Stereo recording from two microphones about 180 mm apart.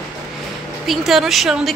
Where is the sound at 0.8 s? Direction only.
Centre (ahead or behind).